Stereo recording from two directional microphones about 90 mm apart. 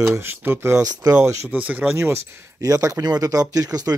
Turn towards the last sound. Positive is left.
turn(degrees=-40)  # may be behind; listen again after turning